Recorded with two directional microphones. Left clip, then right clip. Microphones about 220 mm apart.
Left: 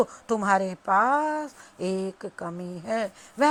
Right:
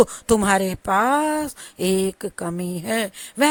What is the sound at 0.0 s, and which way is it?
Speech, 40° right (ahead or behind).